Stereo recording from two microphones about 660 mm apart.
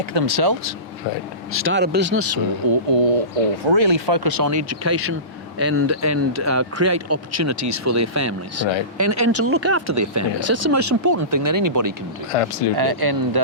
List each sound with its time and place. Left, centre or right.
0.0 s speech: right
1.5 s speech: centre
2.6 s speech: right
3.6 s speech: right
12.3 s speech: left
12.7 s speech: right